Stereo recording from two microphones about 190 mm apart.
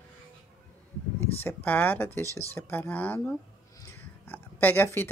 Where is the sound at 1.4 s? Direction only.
10° left (ahead or behind).